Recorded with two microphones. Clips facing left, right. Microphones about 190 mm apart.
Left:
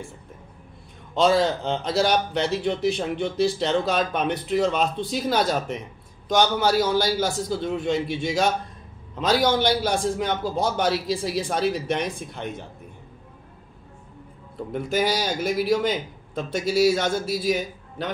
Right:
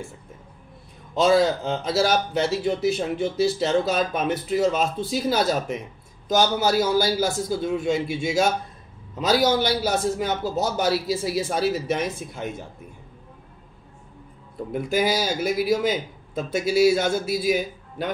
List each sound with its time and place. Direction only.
1.1 s a man's voice: 10° right (ahead or behind)
14.7 s a man's voice: 10° right (ahead or behind)